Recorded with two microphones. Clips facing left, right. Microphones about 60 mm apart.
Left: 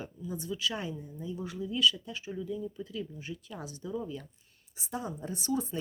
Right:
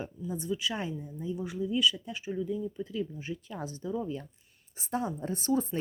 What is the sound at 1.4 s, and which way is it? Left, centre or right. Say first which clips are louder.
Speech: right 1 dB; centre.